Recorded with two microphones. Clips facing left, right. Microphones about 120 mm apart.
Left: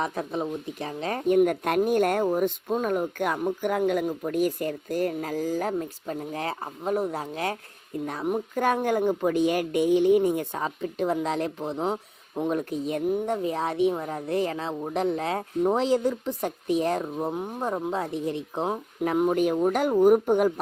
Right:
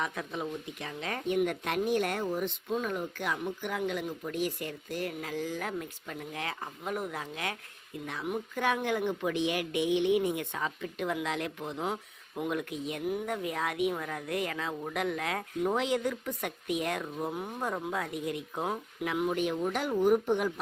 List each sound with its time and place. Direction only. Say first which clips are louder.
0.0 s speech: left 6 dB; 35° left (ahead or behind)
19.0 s speech: left 7 dB; 40° left (ahead or behind)